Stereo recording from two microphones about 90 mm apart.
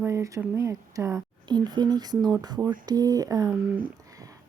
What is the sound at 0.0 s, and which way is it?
Speech, 35° right (ahead or behind).